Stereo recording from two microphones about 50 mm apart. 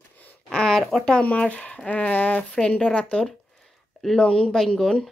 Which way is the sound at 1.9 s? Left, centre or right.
Left.